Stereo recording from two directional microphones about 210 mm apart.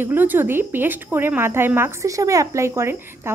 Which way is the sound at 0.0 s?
10° right (ahead or behind).